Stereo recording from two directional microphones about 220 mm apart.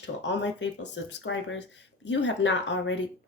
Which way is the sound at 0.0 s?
55° left (ahead or behind).